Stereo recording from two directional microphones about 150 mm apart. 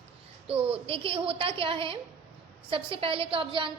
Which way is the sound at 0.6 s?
40° right (ahead or behind).